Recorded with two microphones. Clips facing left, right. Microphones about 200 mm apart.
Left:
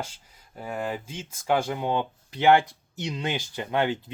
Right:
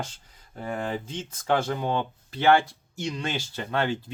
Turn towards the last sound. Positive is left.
turn(degrees=15)  # may be behind; listen again after turning